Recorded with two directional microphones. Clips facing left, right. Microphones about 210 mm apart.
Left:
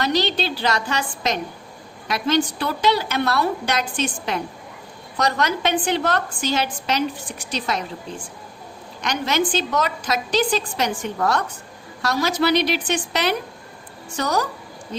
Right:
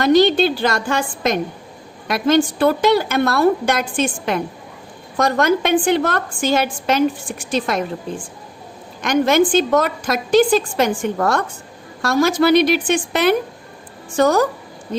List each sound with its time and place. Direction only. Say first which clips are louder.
0.0 s a woman's voice: right 9 dB; 50° right (ahead or behind)
9.0 s a woman's voice: right 8 dB; 50° right (ahead or behind)